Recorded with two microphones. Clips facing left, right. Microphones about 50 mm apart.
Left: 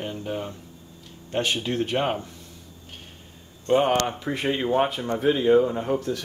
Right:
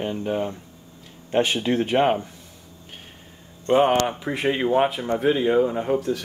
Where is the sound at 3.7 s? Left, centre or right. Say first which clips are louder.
Right 2 dB; centre.